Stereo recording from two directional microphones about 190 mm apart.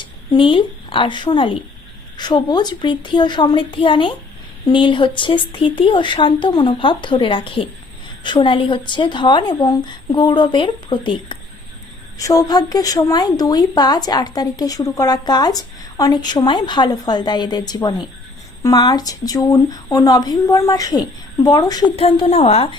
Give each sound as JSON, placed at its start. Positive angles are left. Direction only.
{"t": 0.3, "sound": "a woman's voice", "side_deg": 25}